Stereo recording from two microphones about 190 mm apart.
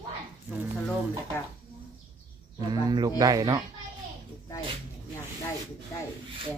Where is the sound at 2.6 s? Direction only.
20° right (ahead or behind).